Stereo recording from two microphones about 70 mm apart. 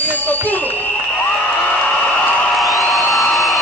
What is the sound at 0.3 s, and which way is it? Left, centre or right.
Bicycle bell, left.